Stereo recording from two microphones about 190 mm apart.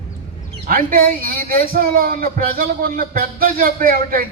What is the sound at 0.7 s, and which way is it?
Music, 50° right (ahead or behind).